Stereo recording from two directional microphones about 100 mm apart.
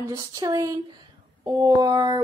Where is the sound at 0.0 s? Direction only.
35° right (ahead or behind).